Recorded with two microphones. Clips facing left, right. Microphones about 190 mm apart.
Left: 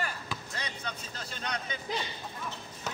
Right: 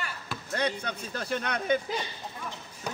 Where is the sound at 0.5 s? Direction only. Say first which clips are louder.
Right 14 dB; 60° right (ahead or behind).